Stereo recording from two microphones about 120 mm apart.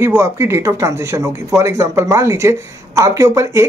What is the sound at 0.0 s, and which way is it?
Speech, 20° right (ahead or behind).